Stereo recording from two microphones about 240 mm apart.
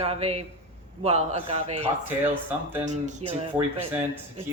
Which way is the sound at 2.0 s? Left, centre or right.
Centre.